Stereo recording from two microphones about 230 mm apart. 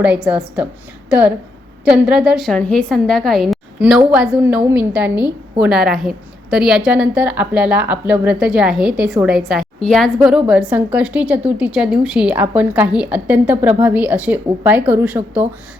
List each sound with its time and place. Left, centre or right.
0.0 s a woman's voice: centre
1.8 s a woman's voice: centre